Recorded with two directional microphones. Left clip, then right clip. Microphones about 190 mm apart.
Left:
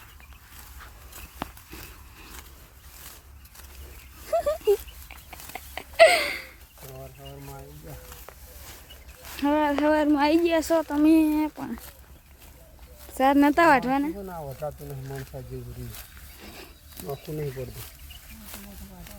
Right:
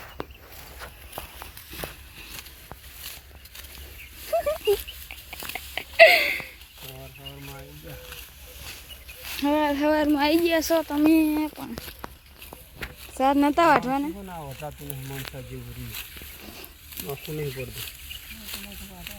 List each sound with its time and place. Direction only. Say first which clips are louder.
4.3 s a sound: even; 10° left (ahead or behind)
4.6 s dog: left 1 dB; 5° right (ahead or behind)
9.4 s speech: even; centre (ahead or behind)
13.1 s speech: left 1 dB; 15° left (ahead or behind)
16.9 s speech: right 1 dB; 20° left (ahead or behind)